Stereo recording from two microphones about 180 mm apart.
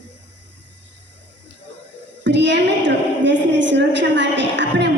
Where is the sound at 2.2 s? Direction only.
75° right (ahead or behind).